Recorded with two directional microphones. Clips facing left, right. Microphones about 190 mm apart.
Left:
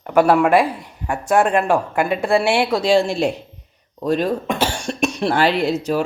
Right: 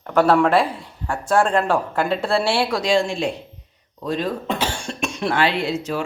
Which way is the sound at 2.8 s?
35° left (ahead or behind).